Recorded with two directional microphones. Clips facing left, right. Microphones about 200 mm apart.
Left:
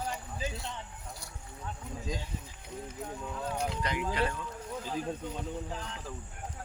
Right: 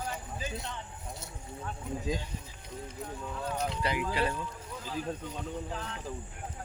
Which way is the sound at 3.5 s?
5° left (ahead or behind).